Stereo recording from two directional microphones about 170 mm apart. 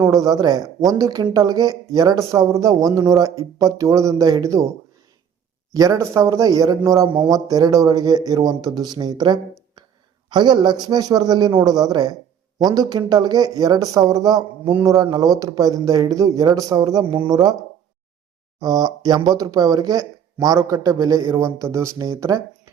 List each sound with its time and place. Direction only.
0.0 s a man's voice: 20° right (ahead or behind)
5.7 s a man's voice: 20° right (ahead or behind)
18.6 s a man's voice: 20° right (ahead or behind)